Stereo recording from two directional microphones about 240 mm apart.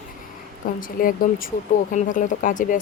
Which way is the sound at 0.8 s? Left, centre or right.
Left.